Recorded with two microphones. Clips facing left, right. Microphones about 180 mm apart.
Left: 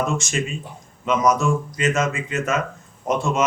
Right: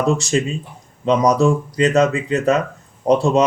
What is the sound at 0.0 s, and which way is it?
Speech, 35° right (ahead or behind).